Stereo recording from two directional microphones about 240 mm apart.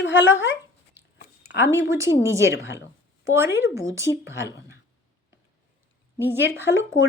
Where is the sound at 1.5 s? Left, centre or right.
Centre.